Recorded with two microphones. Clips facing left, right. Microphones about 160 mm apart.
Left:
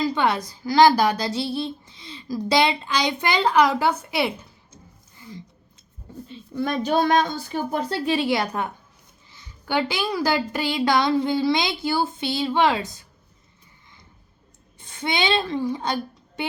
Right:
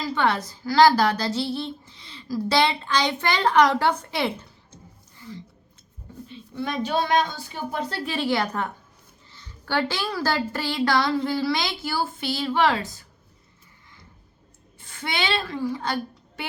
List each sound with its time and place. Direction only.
0.0 s a woman's voice: 15° left (ahead or behind)
6.6 s speech: 45° left (ahead or behind)
8.0 s a woman's voice: 15° left (ahead or behind)
14.8 s a woman's voice: 20° left (ahead or behind)